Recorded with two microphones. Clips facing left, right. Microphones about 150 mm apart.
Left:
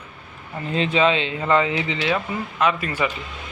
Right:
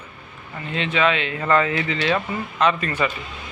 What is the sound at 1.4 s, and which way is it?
Speech, 15° left (ahead or behind).